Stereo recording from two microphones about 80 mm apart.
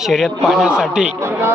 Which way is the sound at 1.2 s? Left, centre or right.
Right.